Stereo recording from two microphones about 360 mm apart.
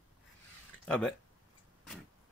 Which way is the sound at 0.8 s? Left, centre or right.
Centre.